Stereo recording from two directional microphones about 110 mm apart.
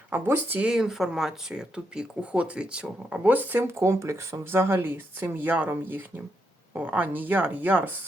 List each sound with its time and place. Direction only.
0.1 s speech: 20° right (ahead or behind)
0.7 s speech: 5° right (ahead or behind)